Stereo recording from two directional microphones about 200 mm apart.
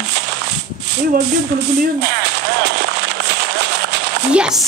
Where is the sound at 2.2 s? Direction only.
55° right (ahead or behind).